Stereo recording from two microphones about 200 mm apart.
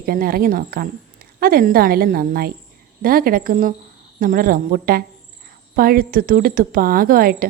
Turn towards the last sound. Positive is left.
turn(degrees=-45)  # may be behind; listen again after turning